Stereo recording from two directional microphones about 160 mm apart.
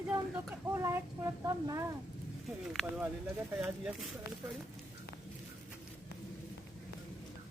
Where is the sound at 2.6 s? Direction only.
5° right (ahead or behind).